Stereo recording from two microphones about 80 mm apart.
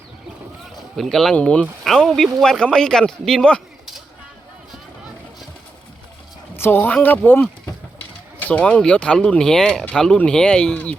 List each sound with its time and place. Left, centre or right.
0.9 s speech: centre
1.4 s a man's voice: centre
1.8 s a man's voice: centre
6.6 s speech: left
8.4 s a man's voice: centre